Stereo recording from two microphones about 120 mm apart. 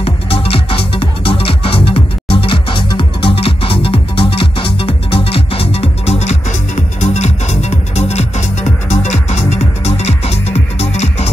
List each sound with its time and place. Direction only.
0.0 s music: 50° left (ahead or behind)